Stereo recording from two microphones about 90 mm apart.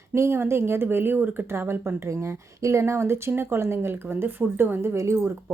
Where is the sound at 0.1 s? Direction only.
30° right (ahead or behind).